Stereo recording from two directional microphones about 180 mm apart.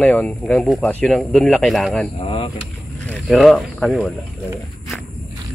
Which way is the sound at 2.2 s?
30° left (ahead or behind).